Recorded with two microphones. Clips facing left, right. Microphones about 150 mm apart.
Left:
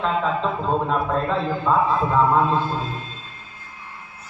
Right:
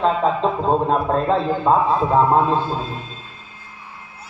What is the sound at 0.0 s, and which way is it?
A man's voice, 40° right (ahead or behind).